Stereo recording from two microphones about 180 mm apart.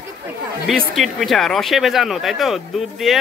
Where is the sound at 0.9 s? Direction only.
Centre (ahead or behind).